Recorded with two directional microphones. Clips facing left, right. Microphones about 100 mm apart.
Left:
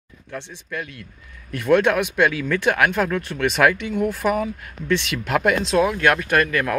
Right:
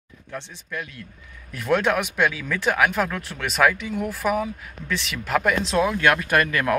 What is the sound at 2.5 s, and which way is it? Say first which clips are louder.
Speech: left 2 dB; 10° right (ahead or behind).